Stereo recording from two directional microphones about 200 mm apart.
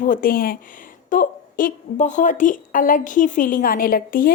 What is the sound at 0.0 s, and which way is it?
A woman's voice, 45° left (ahead or behind).